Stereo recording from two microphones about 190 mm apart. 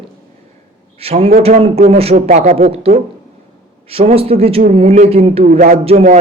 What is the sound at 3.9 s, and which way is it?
A man's voice, 30° right (ahead or behind).